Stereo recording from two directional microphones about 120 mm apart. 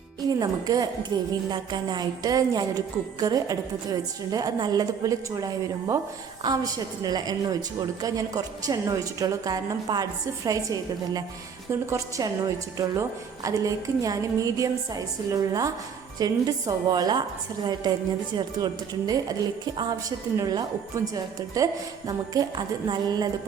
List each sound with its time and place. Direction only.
0.3 s a woman's voice: 35° right (ahead or behind)
18.3 s a woman's voice: 35° right (ahead or behind)